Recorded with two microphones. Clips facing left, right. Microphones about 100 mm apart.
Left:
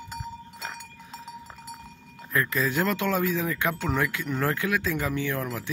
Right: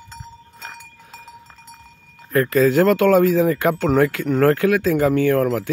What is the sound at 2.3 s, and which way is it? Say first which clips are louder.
Speech: right 11 dB; 45° right (ahead or behind).